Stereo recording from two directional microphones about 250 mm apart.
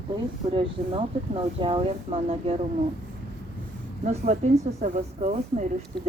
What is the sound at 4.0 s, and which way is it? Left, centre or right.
Speech, right.